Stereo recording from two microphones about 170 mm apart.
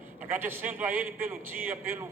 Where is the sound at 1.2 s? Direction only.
15° right (ahead or behind).